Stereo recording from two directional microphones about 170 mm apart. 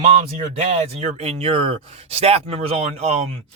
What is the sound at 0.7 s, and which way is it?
Speech, 40° right (ahead or behind).